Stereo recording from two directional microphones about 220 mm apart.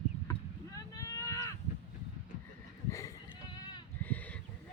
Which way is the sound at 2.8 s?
15° left (ahead or behind).